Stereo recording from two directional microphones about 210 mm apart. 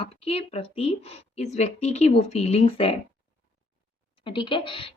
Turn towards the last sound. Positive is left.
turn(degrees=25)  # may be behind; listen again after turning